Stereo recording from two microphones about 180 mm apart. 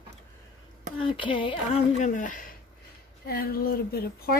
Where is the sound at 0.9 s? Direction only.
30° left (ahead or behind).